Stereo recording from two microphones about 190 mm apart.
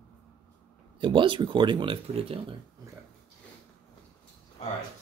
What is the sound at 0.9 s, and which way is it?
Speech, 25° right (ahead or behind).